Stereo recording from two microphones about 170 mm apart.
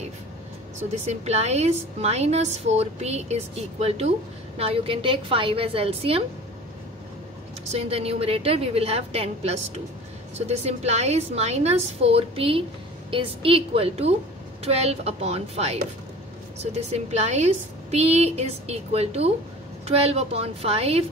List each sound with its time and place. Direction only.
1.0 s a woman's voice: 40° right (ahead or behind)
7.7 s a woman's voice: 35° right (ahead or behind)